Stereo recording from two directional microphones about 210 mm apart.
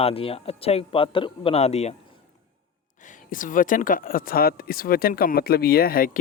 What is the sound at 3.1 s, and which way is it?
Speech, 40° left (ahead or behind).